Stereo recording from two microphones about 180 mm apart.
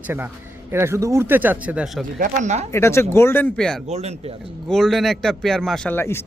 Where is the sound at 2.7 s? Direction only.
15° left (ahead or behind).